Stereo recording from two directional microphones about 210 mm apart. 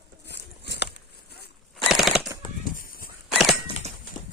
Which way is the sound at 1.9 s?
Centre (ahead or behind).